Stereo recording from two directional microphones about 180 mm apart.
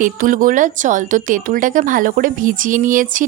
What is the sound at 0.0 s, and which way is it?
A woman's voice, 50° right (ahead or behind).